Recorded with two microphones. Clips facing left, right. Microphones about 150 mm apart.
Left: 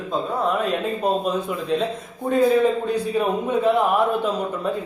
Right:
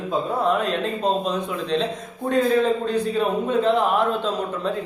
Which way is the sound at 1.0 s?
10° left (ahead or behind).